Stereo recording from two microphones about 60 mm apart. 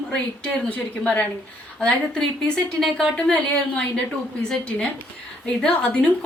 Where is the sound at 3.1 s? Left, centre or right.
Left.